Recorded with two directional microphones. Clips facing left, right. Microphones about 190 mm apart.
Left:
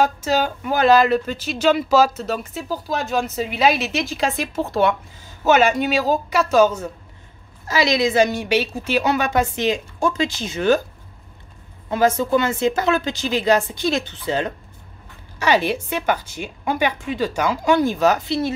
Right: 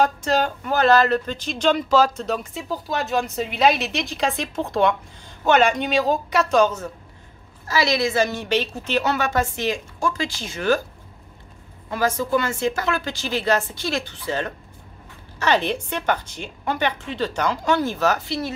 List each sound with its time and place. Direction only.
0.0 s a woman's voice: 5° left (ahead or behind); by 10.8 s 20° left (ahead or behind)
11.9 s a woman's voice: 20° left (ahead or behind)